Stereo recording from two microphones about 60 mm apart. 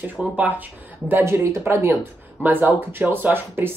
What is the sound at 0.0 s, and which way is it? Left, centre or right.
A woman's voice, right.